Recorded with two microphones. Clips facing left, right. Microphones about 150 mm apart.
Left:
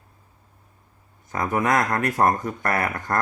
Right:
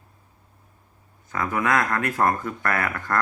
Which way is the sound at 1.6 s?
40° left (ahead or behind).